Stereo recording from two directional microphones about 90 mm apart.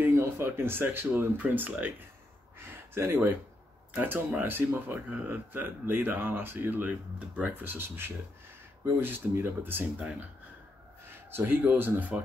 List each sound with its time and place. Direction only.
0.1 s speech: 30° right (ahead or behind)
2.9 s speech: 25° right (ahead or behind)
11.2 s speech: 25° right (ahead or behind)